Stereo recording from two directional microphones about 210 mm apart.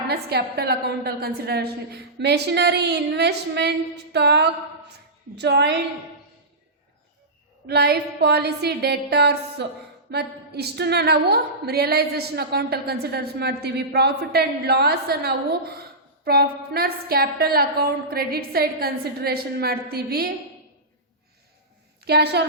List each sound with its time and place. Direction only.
0.1 s a woman's voice: 50° right (ahead or behind)
7.7 s a woman's voice: 50° right (ahead or behind)
22.0 s a woman's voice: 50° right (ahead or behind)